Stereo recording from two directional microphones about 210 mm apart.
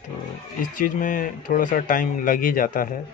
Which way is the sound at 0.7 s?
40° left (ahead or behind).